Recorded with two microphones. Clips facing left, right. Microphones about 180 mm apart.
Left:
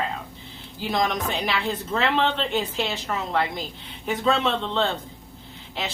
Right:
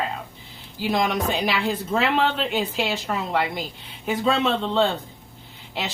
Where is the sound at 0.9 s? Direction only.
10° right (ahead or behind).